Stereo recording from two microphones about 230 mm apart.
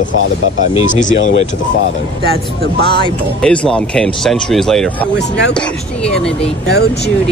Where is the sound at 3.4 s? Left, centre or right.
Centre.